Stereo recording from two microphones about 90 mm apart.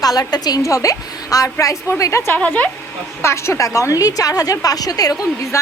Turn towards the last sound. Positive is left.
turn(degrees=45)  # may be behind; listen again after turning